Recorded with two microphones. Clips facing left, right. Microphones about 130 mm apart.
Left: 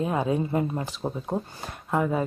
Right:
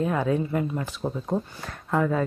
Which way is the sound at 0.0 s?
20° left (ahead or behind).